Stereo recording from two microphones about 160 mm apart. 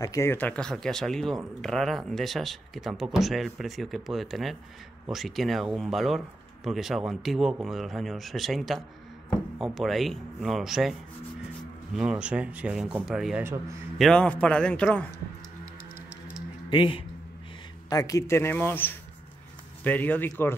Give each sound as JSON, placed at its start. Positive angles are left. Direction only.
{"t": 0.0, "sound": "speech", "side_deg": 20}
{"t": 13.4, "sound": "a man's voice", "side_deg": -15}
{"t": 13.9, "sound": "speech", "side_deg": 5}
{"t": 16.7, "sound": "speech", "side_deg": 30}
{"t": 17.8, "sound": "speech", "side_deg": 20}